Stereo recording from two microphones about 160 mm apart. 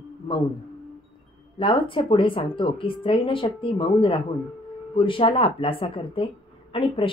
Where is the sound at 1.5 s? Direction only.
35° left (ahead or behind).